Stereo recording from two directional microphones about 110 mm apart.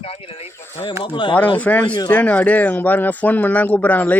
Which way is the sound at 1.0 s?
45° left (ahead or behind).